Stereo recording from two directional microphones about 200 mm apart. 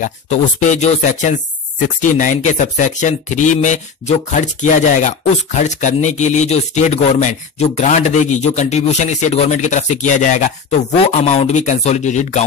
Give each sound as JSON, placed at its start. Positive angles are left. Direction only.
{"t": 0.0, "sound": "speech", "side_deg": 35}